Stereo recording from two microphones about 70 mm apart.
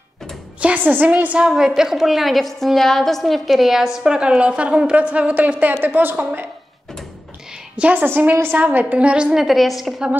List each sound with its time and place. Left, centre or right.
0.6 s a woman's voice: right
1.8 s a woman's voice: centre; by 6.4 s right
7.7 s a woman's voice: centre
8.0 s a woman's voice: right; by 10.1 s centre